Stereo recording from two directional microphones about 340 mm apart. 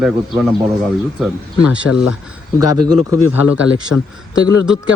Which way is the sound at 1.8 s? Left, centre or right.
Left.